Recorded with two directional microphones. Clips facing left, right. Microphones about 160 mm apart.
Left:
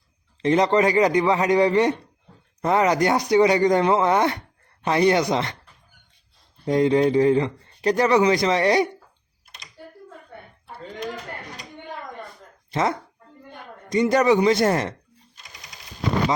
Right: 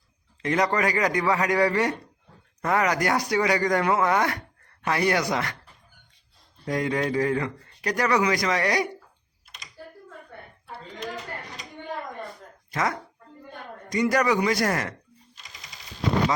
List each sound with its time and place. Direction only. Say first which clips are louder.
0.4 s speech: left 6 dB; 25° left (ahead or behind)
6.7 s speech: left 8 dB; 25° left (ahead or behind)
12.7 s speech: left 4 dB; 25° left (ahead or behind)